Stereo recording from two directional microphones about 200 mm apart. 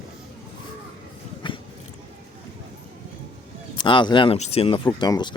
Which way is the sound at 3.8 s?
25° left (ahead or behind).